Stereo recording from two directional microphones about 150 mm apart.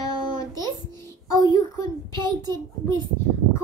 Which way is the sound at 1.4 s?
25° left (ahead or behind).